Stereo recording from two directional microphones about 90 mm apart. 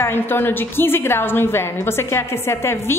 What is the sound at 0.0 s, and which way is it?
A woman's voice, 25° left (ahead or behind).